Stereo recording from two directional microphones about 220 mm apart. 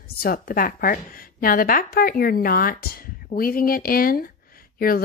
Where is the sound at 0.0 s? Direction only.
45° left (ahead or behind).